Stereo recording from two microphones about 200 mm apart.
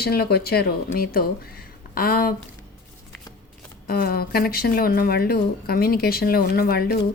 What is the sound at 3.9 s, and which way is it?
Speech, 50° left (ahead or behind).